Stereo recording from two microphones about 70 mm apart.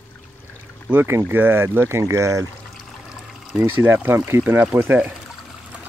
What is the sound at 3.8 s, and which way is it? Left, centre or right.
Speech, right.